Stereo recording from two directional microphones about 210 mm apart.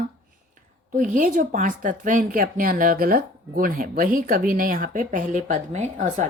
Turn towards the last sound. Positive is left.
turn(degrees=-35)  # may be behind; listen again after turning